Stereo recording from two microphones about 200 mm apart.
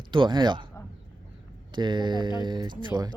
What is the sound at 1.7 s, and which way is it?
Speech, 20° right (ahead or behind).